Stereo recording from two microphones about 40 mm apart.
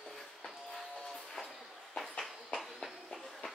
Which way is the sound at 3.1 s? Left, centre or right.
Centre.